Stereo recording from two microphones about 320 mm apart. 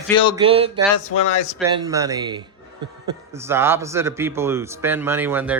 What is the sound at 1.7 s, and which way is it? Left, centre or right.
A man's voice, centre.